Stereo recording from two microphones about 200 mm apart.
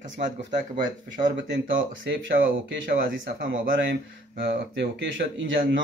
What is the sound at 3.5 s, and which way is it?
Speech, 60° right (ahead or behind).